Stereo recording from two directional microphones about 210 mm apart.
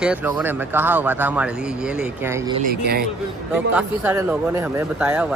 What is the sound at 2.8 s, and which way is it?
Speech, 50° right (ahead or behind).